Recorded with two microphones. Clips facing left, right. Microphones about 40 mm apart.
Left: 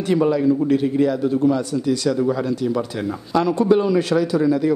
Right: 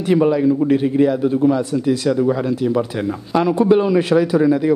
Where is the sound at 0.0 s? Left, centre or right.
Centre.